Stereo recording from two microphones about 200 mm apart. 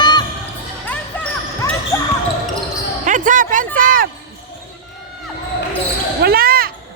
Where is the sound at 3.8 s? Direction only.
45° right (ahead or behind).